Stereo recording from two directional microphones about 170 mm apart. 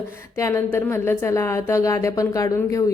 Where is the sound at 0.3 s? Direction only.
15° left (ahead or behind).